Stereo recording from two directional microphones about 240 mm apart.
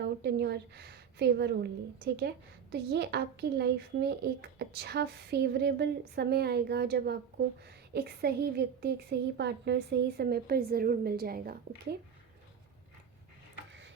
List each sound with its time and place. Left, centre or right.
0.0 s a woman's voice: right
2.7 s a child's voice: right